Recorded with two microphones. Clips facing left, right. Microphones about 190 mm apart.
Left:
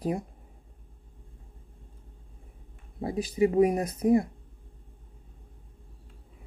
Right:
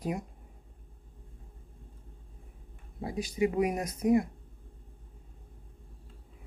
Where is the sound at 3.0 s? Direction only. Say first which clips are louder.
Left 4 dB; 35° left (ahead or behind).